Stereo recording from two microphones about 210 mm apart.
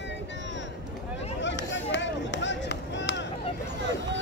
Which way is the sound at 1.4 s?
60° left (ahead or behind).